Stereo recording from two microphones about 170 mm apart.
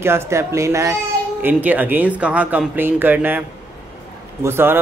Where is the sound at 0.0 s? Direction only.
15° right (ahead or behind).